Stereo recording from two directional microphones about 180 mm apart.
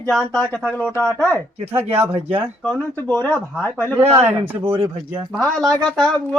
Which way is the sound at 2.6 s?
10° left (ahead or behind).